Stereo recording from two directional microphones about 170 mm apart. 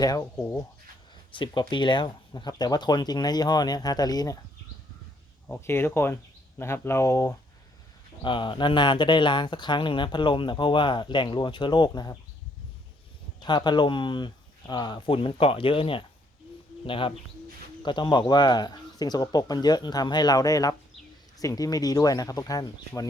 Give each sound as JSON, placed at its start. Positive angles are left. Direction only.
{"t": 0.0, "sound": "speech", "side_deg": 20}
{"t": 1.3, "sound": "speech", "side_deg": 30}
{"t": 5.5, "sound": "speech", "side_deg": 15}
{"t": 8.2, "sound": "speech", "side_deg": 30}
{"t": 13.4, "sound": "speech", "side_deg": 25}